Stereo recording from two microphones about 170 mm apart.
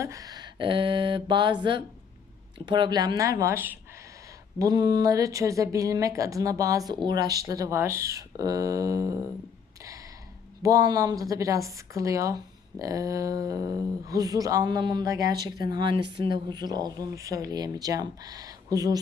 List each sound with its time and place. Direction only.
0.0 s speech: 20° right (ahead or behind)
2.6 s a woman's voice: 25° right (ahead or behind)
4.6 s a woman's voice: 25° right (ahead or behind)
10.6 s a woman's voice: 20° right (ahead or behind)